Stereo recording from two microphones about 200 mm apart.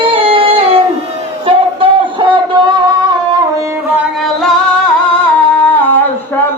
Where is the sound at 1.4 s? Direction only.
25° right (ahead or behind).